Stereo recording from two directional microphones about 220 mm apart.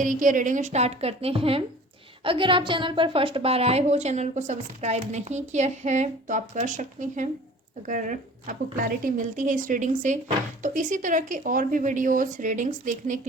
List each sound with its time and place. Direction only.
0.0 s a woman's voice: 35° right (ahead or behind)